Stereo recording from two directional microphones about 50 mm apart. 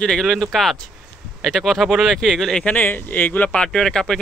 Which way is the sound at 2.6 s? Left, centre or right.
Left.